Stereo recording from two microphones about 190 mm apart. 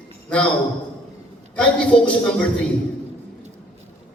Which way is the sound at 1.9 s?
30° left (ahead or behind).